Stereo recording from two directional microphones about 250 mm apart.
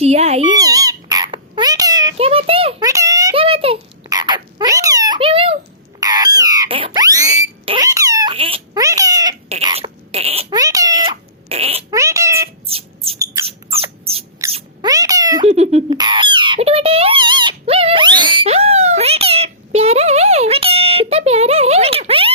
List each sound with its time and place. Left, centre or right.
0.0 s a child's voice: right
0.6 s dog: centre
6.0 s a sound: centre
9.5 s rodents: right
10.5 s cat: centre
11.9 s a sound: centre
12.6 s a sound: right
13.7 s rodents: right
14.5 s cat: centre
15.4 s squawk: right